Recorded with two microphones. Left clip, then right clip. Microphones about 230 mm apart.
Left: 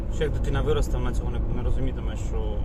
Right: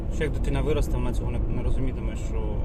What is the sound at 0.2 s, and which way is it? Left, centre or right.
Speech, right.